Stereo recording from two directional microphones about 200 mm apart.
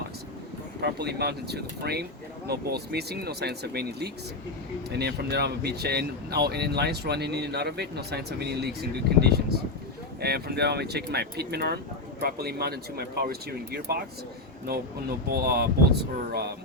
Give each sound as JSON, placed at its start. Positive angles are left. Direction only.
{"t": 0.8, "sound": "speech", "side_deg": -55}